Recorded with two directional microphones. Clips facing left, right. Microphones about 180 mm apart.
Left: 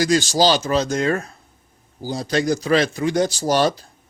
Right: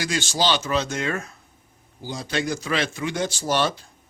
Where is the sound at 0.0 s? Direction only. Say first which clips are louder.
Left 7 dB; 40° left (ahead or behind).